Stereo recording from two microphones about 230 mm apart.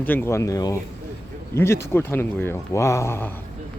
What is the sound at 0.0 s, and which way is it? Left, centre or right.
Speech, centre.